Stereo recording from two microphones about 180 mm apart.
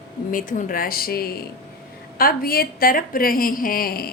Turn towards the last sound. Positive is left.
turn(degrees=55)  # may be behind; listen again after turning